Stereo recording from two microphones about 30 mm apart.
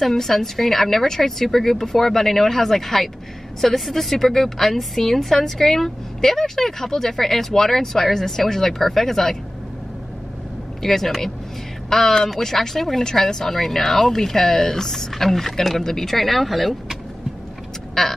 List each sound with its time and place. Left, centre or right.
0.1 s a woman's voice: centre
10.8 s a woman's voice: centre
18.0 s a woman's voice: centre